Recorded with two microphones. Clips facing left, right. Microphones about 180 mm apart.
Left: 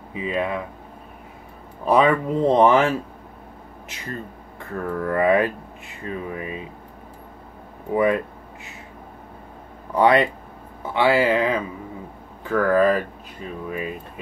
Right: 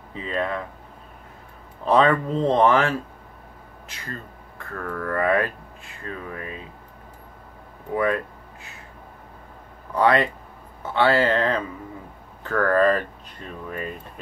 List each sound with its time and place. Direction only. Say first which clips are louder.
0.1 s speech: left 2 dB; 10° left (ahead or behind)
1.9 s speech: left 1 dB; 10° left (ahead or behind)
7.9 s speech: left 4 dB; 15° left (ahead or behind)
9.9 s speech: left 3 dB; 20° left (ahead or behind)